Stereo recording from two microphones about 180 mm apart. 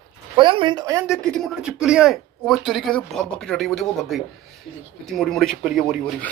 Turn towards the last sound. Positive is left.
turn(degrees=0)  # may be behind; listen again after turning